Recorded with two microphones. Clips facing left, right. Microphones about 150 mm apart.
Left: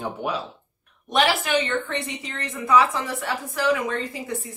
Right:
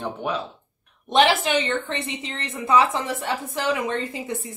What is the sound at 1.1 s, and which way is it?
Speech, 20° right (ahead or behind).